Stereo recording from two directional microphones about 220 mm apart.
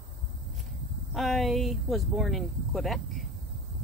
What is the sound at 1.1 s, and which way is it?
Speech, centre (ahead or behind).